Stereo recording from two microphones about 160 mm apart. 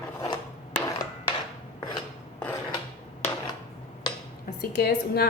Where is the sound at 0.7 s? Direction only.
25° left (ahead or behind).